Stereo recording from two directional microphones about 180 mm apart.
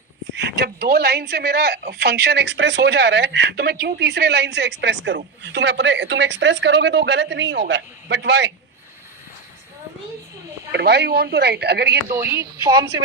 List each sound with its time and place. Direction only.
0.3 s speech: 75° right (ahead or behind)
10.7 s speech: 65° right (ahead or behind)
12.1 s a woman's voice: 15° right (ahead or behind)